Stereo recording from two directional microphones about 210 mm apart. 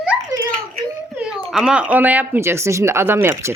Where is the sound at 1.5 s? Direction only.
5° right (ahead or behind).